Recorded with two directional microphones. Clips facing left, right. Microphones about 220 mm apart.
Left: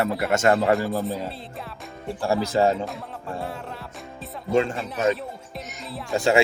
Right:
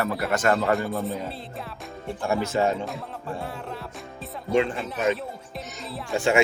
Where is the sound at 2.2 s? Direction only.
35° left (ahead or behind).